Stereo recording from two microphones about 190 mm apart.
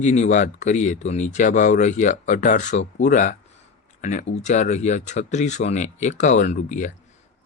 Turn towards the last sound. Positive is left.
turn(degrees=40)  # may be behind; listen again after turning